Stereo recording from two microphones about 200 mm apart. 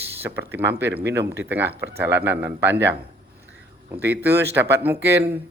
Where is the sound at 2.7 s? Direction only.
60° right (ahead or behind).